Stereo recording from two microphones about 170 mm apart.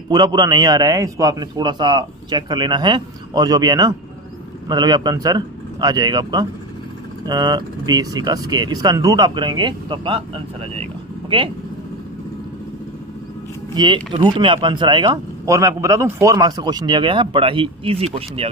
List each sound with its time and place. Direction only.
0.1 s speech: 25° right (ahead or behind)
13.7 s speech: 25° right (ahead or behind)